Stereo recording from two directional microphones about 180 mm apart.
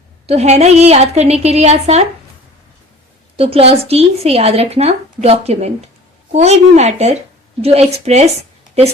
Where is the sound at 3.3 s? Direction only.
35° right (ahead or behind).